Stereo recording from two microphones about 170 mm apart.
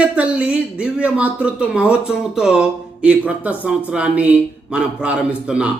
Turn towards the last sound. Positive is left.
turn(degrees=-5)  # may be behind; listen again after turning